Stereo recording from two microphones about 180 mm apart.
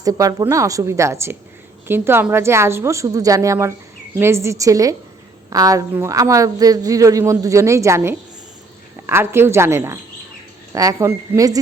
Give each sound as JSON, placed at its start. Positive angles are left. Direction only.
{"t": 0.0, "sound": "a woman's voice", "side_deg": -20}